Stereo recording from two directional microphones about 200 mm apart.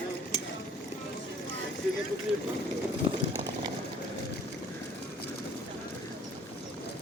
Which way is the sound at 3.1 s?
25° right (ahead or behind).